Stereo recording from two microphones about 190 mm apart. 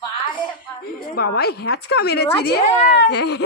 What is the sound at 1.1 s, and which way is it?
A woman's voice, 55° left (ahead or behind).